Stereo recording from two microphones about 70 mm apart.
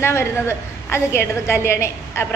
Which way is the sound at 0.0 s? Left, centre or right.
Left.